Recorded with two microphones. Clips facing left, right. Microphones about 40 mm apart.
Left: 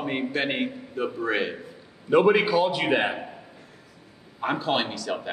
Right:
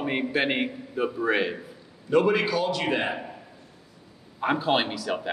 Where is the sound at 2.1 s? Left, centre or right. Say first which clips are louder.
Left 3 dB; centre.